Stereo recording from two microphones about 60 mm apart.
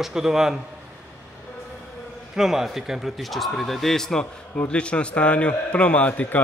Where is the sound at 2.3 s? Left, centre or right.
Centre.